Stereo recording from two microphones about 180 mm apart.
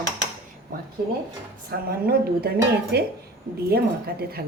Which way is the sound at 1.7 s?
55° right (ahead or behind).